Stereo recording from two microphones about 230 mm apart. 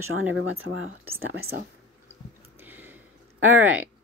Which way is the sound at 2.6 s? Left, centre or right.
Centre.